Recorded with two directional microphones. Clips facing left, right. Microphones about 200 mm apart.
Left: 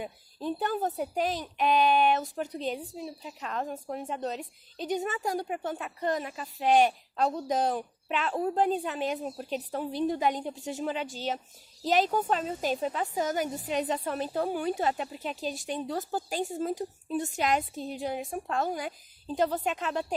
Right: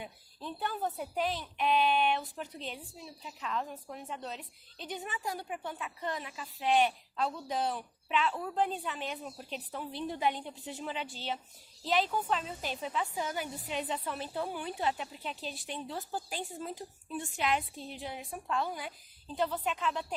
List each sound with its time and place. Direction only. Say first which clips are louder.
0.0 s a woman's voice: left 8 dB; 45° left (ahead or behind)